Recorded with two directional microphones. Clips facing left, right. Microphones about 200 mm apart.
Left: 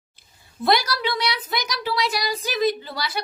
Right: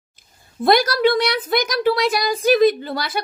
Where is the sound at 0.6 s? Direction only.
50° right (ahead or behind).